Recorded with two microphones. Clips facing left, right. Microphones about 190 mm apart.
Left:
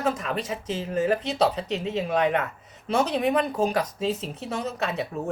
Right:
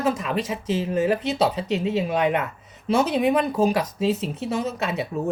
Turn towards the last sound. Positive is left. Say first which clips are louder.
# right 3 dB
turn(degrees=-5)  # may be behind; listen again after turning